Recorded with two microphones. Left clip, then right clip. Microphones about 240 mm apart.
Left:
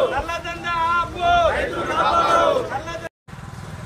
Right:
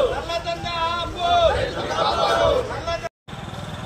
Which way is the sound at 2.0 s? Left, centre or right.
Centre.